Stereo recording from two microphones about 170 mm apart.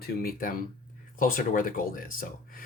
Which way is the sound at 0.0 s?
60° left (ahead or behind).